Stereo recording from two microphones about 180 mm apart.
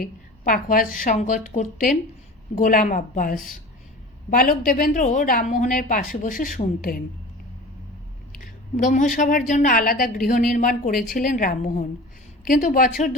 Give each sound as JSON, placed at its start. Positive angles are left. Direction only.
{"t": 0.0, "sound": "a woman's voice", "side_deg": 50}
{"t": 8.7, "sound": "a woman's voice", "side_deg": 45}